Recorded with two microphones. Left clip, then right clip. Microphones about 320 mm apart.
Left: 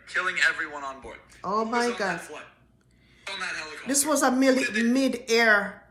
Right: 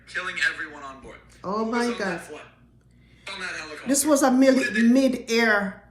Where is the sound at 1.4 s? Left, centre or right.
Centre.